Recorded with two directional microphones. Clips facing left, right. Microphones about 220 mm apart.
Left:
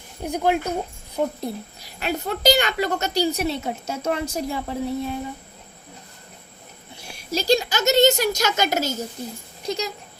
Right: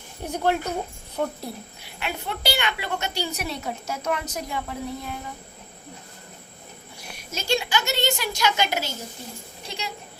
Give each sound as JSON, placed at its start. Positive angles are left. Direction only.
{"t": 0.3, "sound": "speech", "side_deg": 10}
{"t": 1.8, "sound": "a woman's voice", "side_deg": 40}
{"t": 7.1, "sound": "a woman's voice", "side_deg": 35}